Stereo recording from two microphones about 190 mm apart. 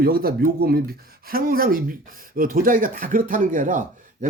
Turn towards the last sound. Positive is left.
turn(degrees=-45)  # may be behind; listen again after turning